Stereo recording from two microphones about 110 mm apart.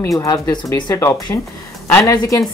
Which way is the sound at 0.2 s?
30° left (ahead or behind).